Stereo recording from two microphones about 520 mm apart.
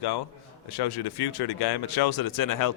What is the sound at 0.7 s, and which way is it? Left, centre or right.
Speech, left.